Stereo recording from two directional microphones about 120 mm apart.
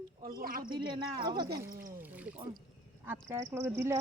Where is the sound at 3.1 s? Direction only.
25° right (ahead or behind).